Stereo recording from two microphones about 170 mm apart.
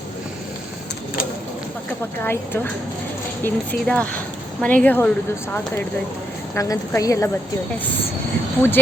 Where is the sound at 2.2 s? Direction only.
15° left (ahead or behind).